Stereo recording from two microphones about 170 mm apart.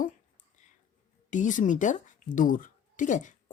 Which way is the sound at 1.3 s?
50° left (ahead or behind).